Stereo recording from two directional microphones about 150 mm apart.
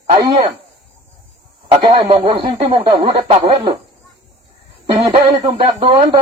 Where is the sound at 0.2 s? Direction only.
35° right (ahead or behind).